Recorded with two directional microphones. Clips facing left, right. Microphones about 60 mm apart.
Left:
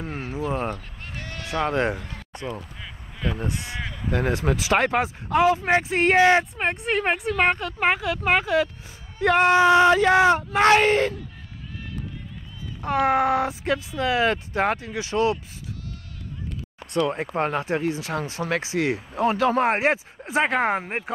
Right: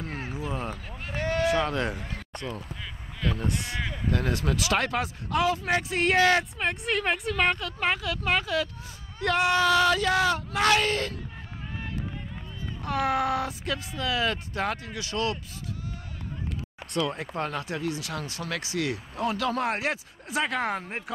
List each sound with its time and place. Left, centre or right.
0.7 s speech: centre
1.1 s a sound: right
1.5 s speech: left
12.8 s speech: left
17.1 s speech: left